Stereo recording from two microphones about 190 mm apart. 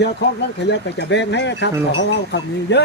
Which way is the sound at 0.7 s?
70° left (ahead or behind).